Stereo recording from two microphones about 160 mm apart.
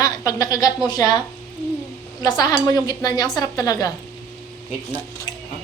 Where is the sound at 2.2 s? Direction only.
25° left (ahead or behind).